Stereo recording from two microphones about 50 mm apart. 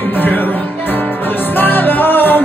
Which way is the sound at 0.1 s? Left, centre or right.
Left.